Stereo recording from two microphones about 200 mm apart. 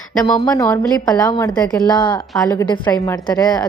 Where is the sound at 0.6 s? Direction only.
5° left (ahead or behind).